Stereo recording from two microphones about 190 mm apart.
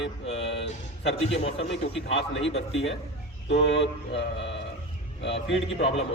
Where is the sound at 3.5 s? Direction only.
70° left (ahead or behind).